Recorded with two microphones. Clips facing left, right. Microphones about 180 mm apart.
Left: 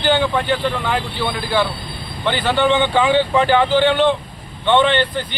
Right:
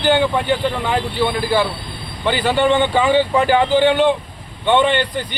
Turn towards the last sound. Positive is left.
turn(degrees=-10)  # may be behind; listen again after turning